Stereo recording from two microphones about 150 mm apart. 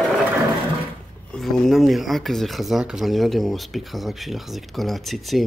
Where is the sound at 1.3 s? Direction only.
Centre (ahead or behind).